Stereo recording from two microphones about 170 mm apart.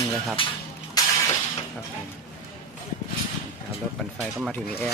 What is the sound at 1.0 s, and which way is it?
Shatter, 20° left (ahead or behind).